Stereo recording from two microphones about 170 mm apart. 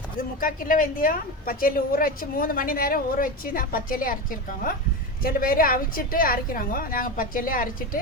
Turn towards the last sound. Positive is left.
turn(degrees=55)  # may be behind; listen again after turning